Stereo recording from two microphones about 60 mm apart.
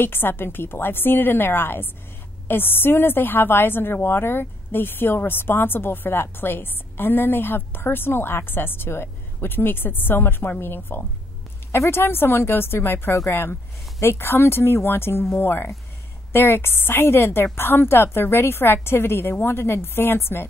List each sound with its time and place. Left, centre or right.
0.0 s a woman's voice: left